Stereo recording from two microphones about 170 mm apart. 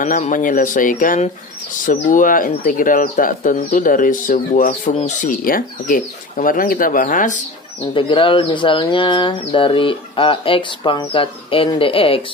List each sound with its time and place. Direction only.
0.0 s speech: 50° left (ahead or behind)
7.9 s speech: 30° left (ahead or behind)